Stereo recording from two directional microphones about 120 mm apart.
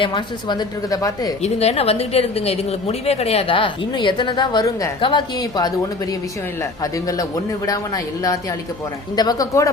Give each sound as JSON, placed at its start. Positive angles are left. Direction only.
{"t": 0.0, "sound": "a woman's voice", "side_deg": 40}
{"t": 1.4, "sound": "a woman's voice", "side_deg": 60}
{"t": 4.9, "sound": "a woman's voice", "side_deg": 45}
{"t": 5.4, "sound": "a woman's voice", "side_deg": 30}